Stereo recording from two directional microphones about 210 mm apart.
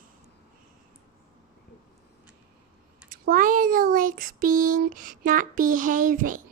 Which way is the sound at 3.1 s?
40° right (ahead or behind).